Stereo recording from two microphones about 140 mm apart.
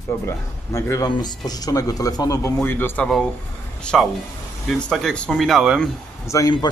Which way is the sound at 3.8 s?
5° left (ahead or behind).